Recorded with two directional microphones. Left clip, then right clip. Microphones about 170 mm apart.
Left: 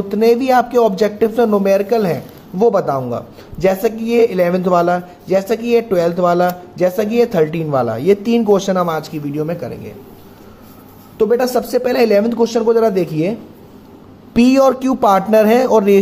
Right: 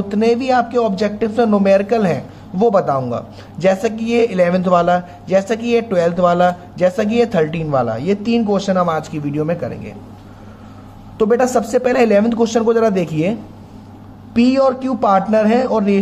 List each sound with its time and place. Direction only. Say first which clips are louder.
0.1 s speech: left 3 dB; 35° left (ahead or behind)
11.1 s speech: even; 20° left (ahead or behind)
14.3 s speech: left 2 dB; 45° left (ahead or behind)